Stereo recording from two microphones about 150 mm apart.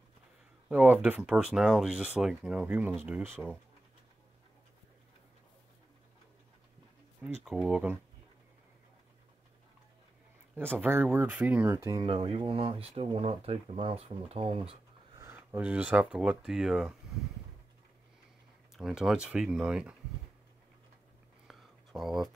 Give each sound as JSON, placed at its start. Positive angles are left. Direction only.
{"t": 0.7, "sound": "speech", "side_deg": -10}
{"t": 7.4, "sound": "speech", "side_deg": -5}
{"t": 10.8, "sound": "speech", "side_deg": -15}
{"t": 12.0, "sound": "speech", "side_deg": -35}
{"t": 15.3, "sound": "speech", "side_deg": -10}
{"t": 18.8, "sound": "speech", "side_deg": 0}
{"t": 21.5, "sound": "a sound", "side_deg": 0}